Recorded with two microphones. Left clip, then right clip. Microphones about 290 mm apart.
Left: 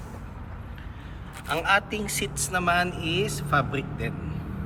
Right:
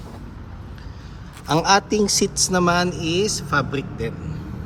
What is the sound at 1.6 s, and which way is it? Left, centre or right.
Speech, centre.